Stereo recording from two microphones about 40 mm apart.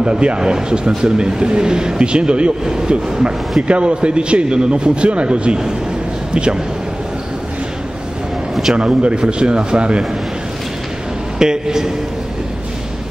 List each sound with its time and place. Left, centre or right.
0.0 s a man's voice: right
8.7 s a man's voice: right
11.3 s a man's voice: centre